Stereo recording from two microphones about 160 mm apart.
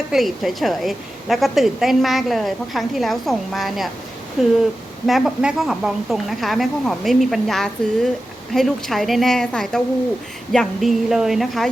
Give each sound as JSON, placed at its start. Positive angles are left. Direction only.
{"t": 0.1, "sound": "a woman's voice", "side_deg": 0}